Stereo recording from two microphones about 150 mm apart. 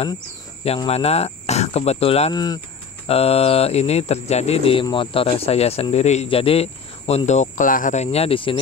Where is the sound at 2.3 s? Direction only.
25° left (ahead or behind).